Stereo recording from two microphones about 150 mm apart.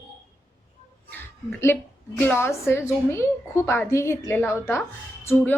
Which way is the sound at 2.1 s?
15° left (ahead or behind).